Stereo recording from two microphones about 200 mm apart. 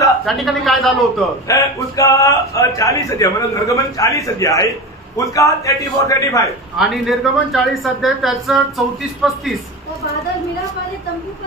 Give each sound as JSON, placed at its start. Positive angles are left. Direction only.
{"t": 0.2, "sound": "a woman's voice", "side_deg": 0}
{"t": 1.5, "sound": "a man's voice", "side_deg": 15}
{"t": 6.8, "sound": "a woman's voice", "side_deg": 0}